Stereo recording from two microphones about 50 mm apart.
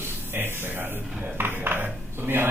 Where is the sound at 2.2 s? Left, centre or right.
Right.